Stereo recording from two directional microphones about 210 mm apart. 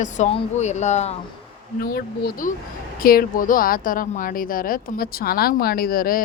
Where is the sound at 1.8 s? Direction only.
45° left (ahead or behind).